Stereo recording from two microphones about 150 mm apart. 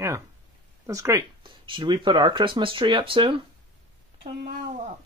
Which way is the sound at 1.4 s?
35° right (ahead or behind).